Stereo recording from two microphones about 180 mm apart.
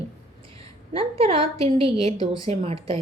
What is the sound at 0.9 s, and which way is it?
A woman's voice, 30° right (ahead or behind).